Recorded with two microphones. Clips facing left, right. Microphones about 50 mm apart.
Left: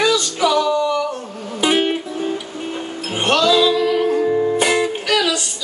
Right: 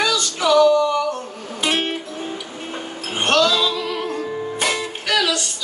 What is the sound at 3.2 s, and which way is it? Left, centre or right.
Music, centre.